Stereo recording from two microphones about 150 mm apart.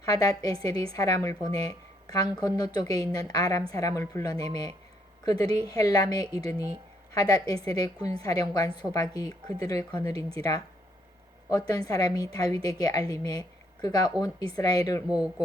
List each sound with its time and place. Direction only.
0.0 s a woman's voice: 25° left (ahead or behind)
15.0 s speech: 5° right (ahead or behind)